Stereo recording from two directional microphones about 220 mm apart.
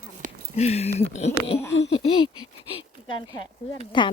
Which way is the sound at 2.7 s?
20° left (ahead or behind).